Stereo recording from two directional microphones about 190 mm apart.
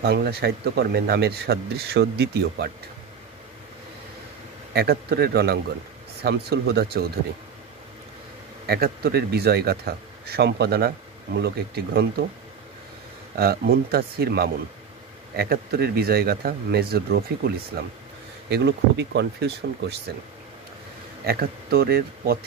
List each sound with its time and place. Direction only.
0.0 s speech: 55° right (ahead or behind)
4.7 s speech: 55° right (ahead or behind)
8.6 s speech: 55° right (ahead or behind)
13.4 s speech: 55° right (ahead or behind)
21.3 s speech: 55° right (ahead or behind)